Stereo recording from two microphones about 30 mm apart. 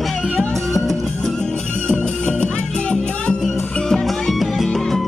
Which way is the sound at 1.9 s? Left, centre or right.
Left.